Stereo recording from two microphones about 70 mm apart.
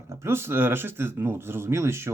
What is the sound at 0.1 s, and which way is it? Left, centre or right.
Speech, right.